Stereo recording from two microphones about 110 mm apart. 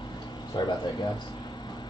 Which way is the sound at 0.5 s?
40° left (ahead or behind).